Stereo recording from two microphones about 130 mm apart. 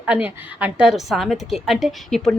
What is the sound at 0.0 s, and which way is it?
A woman's voice, 10° right (ahead or behind).